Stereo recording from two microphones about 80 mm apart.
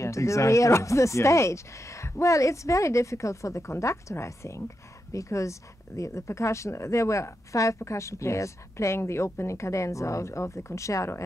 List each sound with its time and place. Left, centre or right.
0.0 s speech: left